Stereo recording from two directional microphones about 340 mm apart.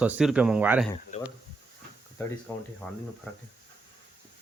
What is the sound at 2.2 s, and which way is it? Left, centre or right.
Speech, centre.